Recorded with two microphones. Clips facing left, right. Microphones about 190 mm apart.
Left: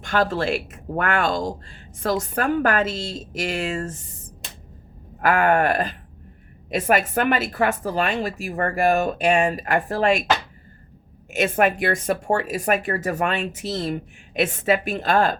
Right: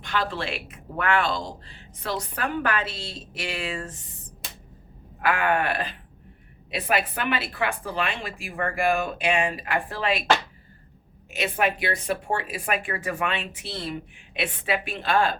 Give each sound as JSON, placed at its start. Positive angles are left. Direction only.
{"t": 0.0, "sound": "speech", "side_deg": 45}
{"t": 5.2, "sound": "speech", "side_deg": 45}
{"t": 11.3, "sound": "speech", "side_deg": 50}